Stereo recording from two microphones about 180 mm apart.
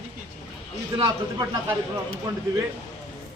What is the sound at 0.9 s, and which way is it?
Speech, 20° right (ahead or behind).